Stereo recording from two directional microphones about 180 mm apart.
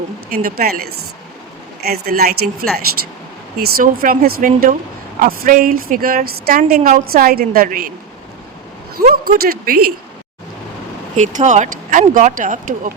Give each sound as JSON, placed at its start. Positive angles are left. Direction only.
{"t": 0.3, "sound": "a woman's voice", "side_deg": -55}
{"t": 9.0, "sound": "speech", "side_deg": -55}
{"t": 11.2, "sound": "a woman's voice", "side_deg": -45}